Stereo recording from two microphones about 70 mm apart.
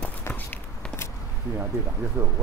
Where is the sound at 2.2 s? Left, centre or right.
Right.